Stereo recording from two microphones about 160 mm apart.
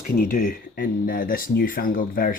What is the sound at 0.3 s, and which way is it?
Speech, 60° left (ahead or behind).